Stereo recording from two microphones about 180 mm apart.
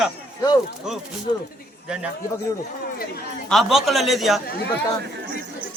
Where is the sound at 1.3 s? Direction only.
25° left (ahead or behind).